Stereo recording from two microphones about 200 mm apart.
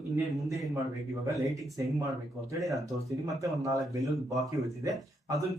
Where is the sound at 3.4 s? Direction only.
15° right (ahead or behind).